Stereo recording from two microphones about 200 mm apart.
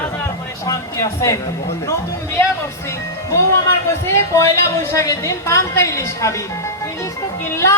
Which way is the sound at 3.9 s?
15° left (ahead or behind).